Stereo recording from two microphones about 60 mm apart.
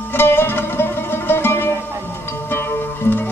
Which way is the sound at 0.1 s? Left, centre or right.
Left.